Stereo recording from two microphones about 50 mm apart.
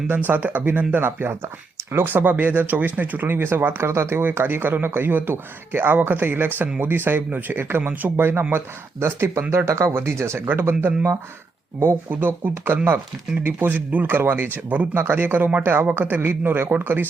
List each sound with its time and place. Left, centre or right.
0.3 s speech: right
1.0 s speech: right
2.0 s speech: right
4.4 s speech: right
9.9 s speech: right
10.5 s speech: right
12.1 s speech: right
16.0 s speech: right